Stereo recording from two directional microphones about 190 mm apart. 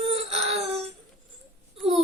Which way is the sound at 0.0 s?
30° right (ahead or behind).